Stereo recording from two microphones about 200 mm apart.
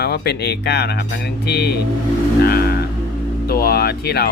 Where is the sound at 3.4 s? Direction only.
50° left (ahead or behind).